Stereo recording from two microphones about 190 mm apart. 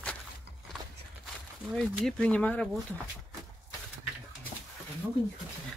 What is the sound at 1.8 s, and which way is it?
Speech, 5° left (ahead or behind).